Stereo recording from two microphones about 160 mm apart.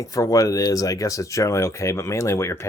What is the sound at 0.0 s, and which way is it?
Speech, 20° left (ahead or behind).